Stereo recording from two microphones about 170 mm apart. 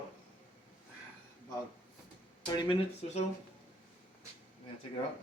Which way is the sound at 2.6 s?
30° left (ahead or behind).